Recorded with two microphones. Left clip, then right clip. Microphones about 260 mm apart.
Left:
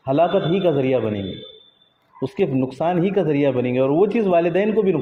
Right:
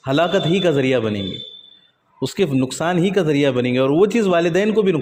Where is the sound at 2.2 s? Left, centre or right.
Right.